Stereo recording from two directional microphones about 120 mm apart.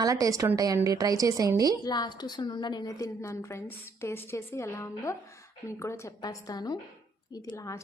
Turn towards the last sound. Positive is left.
turn(degrees=35)  # may be behind; listen again after turning